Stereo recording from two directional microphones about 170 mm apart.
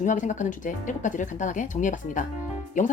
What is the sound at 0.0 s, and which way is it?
Speech, 45° left (ahead or behind).